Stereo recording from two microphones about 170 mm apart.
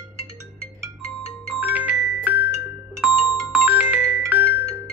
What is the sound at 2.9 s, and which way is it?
Music, 5° right (ahead or behind).